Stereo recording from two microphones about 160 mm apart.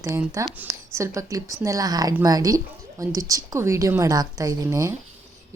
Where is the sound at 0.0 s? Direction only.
15° right (ahead or behind).